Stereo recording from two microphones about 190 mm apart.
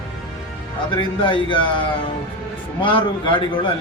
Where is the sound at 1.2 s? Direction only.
25° left (ahead or behind).